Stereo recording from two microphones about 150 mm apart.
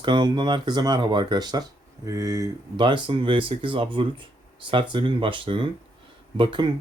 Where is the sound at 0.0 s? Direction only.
30° right (ahead or behind).